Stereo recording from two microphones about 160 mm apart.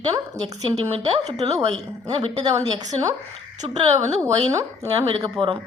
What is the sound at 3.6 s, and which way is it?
Speech, 30° right (ahead or behind).